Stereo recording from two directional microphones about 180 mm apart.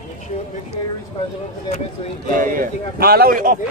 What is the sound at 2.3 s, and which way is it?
Speech, 50° right (ahead or behind).